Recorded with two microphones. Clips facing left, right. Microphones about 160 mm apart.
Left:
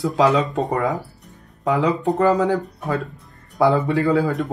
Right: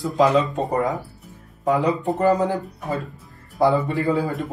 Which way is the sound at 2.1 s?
80° left.